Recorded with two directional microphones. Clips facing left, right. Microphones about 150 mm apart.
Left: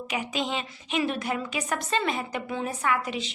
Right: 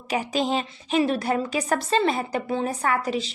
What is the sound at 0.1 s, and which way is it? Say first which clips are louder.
A woman's voice: right 6 dB; 35° right (ahead or behind).